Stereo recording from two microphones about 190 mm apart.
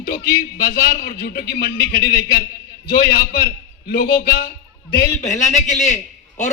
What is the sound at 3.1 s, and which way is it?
A man's voice, 50° left (ahead or behind).